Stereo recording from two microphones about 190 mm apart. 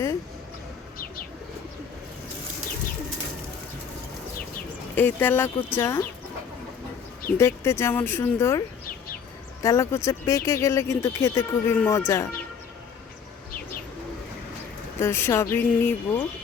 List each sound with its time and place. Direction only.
4.9 s speech: 10° left (ahead or behind)
7.3 s speech: 15° left (ahead or behind)
9.6 s speech: 15° left (ahead or behind)
15.0 s speech: 15° left (ahead or behind)